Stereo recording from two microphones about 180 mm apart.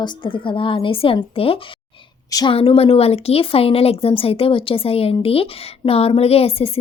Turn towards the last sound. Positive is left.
turn(degrees=35)  # may be behind; listen again after turning